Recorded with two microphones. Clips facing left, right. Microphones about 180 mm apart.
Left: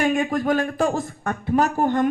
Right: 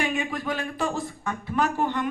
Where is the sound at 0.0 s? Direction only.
45° left (ahead or behind).